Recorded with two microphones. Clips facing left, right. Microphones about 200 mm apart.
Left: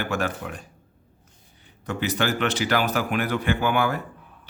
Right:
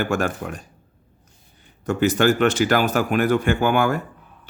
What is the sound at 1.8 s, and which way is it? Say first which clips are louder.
A man's voice: right 7 dB; 45° right (ahead or behind).